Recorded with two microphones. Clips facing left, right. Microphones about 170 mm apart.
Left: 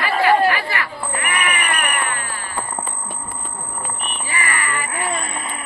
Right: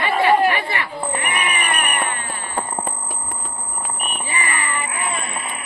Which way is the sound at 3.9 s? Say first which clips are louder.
Right 2 dB; 20° right (ahead or behind).